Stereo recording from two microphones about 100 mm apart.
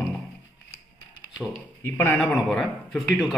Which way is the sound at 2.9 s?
Centre (ahead or behind).